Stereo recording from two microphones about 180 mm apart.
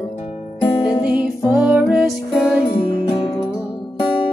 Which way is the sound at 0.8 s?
5° right (ahead or behind).